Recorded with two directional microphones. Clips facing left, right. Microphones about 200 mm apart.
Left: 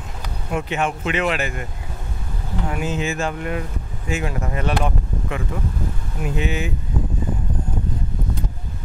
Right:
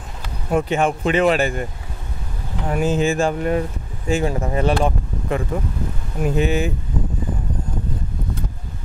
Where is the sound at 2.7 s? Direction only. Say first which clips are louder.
Right 7 dB; 40° right (ahead or behind).